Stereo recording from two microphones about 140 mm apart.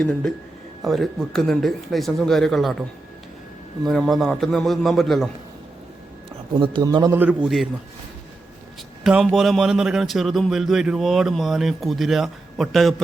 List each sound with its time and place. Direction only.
0.0 s speech: 5° left (ahead or behind)
3.8 s speech: 5° left (ahead or behind)
6.5 s a man's voice: 35° right (ahead or behind)
7.4 s speech: centre (ahead or behind)
9.0 s speech: 5° right (ahead or behind)